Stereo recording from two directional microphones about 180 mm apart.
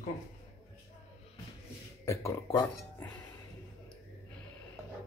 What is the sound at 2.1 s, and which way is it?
Speech, 15° left (ahead or behind).